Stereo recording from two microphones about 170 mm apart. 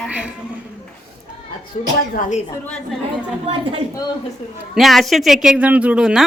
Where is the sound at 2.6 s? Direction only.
5° left (ahead or behind).